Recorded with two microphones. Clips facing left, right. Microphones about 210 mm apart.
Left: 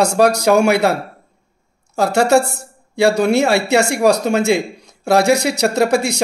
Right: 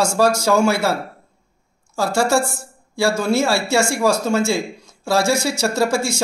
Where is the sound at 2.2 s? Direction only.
20° left (ahead or behind).